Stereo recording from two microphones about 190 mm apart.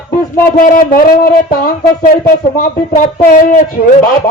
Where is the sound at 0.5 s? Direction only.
45° left (ahead or behind).